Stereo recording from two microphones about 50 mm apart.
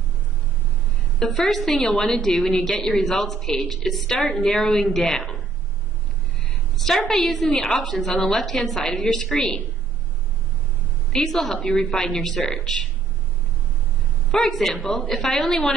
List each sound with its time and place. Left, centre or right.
1.3 s a woman's voice: centre
4.2 s a woman's voice: left
6.8 s a woman's voice: centre
11.1 s a woman's voice: centre
11.6 s a woman's voice: left
11.9 s a woman's voice: centre
14.4 s a woman's voice: centre
14.8 s a woman's voice: left
15.0 s a woman's voice: centre